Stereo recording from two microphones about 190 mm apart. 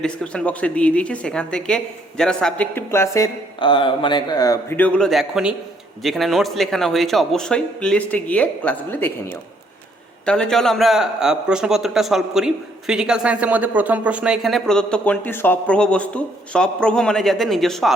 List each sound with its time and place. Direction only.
0.0 s a man's voice: 5° left (ahead or behind)
3.6 s a man's voice: 25° left (ahead or behind); by 17.9 s centre (ahead or behind)